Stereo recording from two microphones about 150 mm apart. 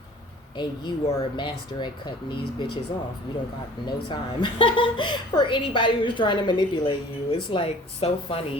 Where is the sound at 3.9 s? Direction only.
30° left (ahead or behind).